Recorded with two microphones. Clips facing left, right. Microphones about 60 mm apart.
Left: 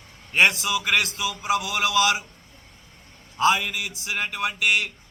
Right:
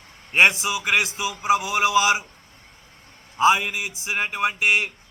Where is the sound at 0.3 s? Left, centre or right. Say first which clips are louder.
Right 2 dB; right.